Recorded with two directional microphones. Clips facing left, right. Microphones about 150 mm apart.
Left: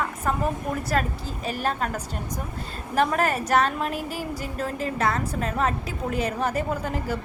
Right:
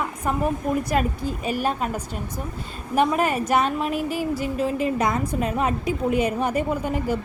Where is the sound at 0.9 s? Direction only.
10° right (ahead or behind).